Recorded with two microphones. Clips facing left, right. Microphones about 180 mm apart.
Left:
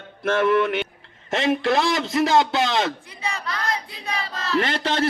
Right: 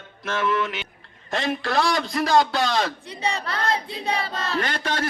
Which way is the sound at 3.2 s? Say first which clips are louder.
Right 4 dB; 35° right (ahead or behind).